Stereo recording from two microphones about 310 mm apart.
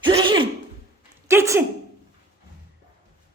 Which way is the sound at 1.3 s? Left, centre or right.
Centre.